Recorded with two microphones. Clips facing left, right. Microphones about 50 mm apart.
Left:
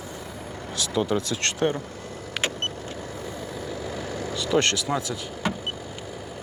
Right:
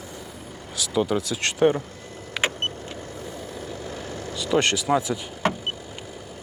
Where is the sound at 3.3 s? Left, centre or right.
Centre.